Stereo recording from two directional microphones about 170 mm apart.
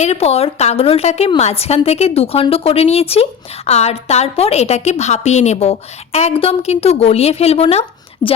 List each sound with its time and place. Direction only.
0.0 s a woman's voice: 40° left (ahead or behind)